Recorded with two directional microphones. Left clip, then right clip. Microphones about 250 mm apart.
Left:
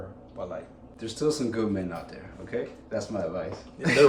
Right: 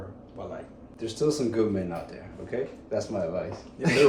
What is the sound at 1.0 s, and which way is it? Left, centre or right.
Speech, centre.